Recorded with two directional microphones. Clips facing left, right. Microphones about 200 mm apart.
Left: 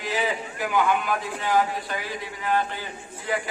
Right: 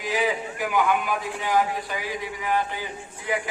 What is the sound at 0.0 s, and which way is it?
A man's voice, 10° right (ahead or behind).